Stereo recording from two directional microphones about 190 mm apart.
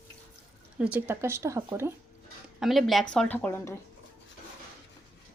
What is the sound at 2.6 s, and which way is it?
Speech, centre (ahead or behind).